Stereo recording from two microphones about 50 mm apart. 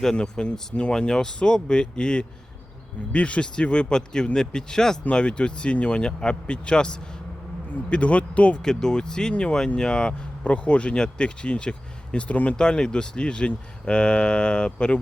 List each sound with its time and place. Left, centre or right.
0.0 s speech: centre
8.6 s speech: centre